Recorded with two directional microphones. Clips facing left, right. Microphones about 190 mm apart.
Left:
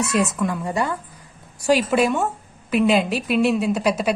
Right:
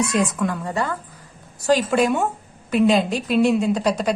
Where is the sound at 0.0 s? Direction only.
Centre (ahead or behind).